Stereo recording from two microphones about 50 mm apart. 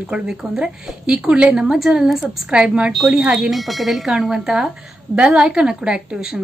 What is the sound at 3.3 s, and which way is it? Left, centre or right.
A woman's voice, centre.